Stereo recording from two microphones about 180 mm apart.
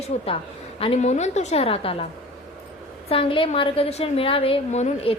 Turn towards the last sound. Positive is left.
turn(degrees=35)  # may be behind; listen again after turning